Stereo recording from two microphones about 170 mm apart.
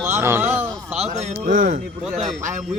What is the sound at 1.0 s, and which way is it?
Speech, 40° right (ahead or behind).